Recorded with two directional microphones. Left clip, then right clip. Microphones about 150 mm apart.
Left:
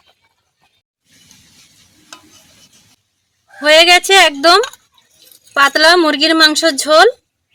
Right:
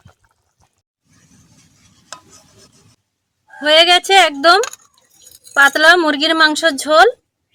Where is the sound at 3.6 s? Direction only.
20° left (ahead or behind).